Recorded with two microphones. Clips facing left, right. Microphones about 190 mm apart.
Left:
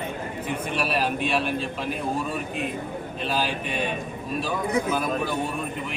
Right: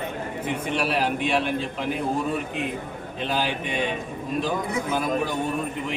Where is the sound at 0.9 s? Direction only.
20° right (ahead or behind).